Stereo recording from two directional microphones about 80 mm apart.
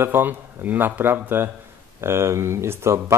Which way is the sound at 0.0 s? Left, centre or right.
Right.